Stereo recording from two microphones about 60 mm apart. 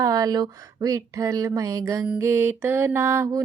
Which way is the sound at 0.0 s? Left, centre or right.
Right.